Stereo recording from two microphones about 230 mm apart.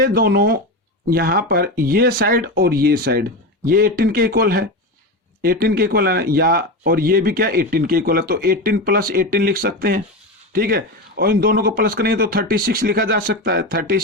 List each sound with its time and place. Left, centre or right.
0.0 s speech: right